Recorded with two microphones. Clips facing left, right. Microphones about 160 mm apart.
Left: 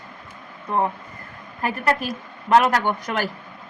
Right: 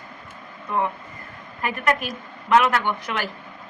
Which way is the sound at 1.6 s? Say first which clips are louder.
Left 1 dB; 35° left (ahead or behind).